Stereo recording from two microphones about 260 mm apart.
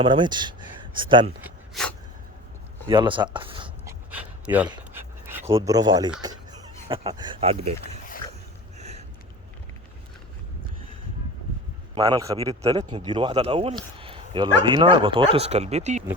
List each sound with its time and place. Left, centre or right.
0.0 s speech: centre
1.4 s a sound: centre
2.8 s speech: centre
3.3 s a sound: centre
4.4 s speech: centre
4.7 s dog: centre
6.2 s speech: centre
8.8 s a sound: right
11.9 s a man's voice: centre